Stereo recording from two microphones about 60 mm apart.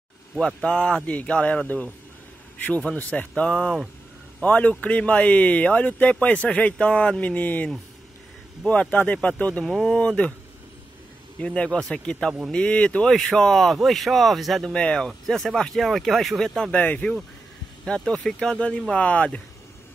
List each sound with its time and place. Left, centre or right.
0.6 s speech: centre
3.0 s speech: left
9.7 s speech: centre
9.9 s speech: centre
11.3 s speech: centre
13.1 s speech: centre
14.7 s speech: centre
16.7 s speech: left
17.8 s speech: centre